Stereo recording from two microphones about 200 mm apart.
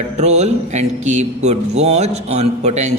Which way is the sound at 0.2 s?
35° right (ahead or behind).